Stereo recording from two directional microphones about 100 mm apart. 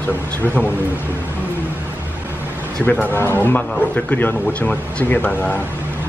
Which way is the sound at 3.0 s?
20° left (ahead or behind).